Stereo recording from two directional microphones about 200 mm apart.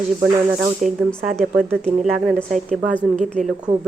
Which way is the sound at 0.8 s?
5° left (ahead or behind).